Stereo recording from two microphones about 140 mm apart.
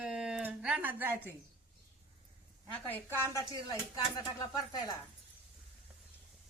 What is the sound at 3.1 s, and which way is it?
Speech, 20° left (ahead or behind).